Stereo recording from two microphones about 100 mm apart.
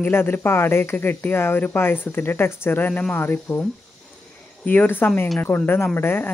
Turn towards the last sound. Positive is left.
turn(degrees=20)  # may be behind; listen again after turning